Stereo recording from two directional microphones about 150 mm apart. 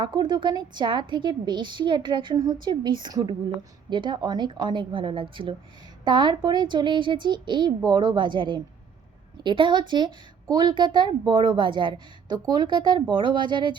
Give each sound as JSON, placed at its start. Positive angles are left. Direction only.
{"t": 0.0, "sound": "a woman's voice", "side_deg": -30}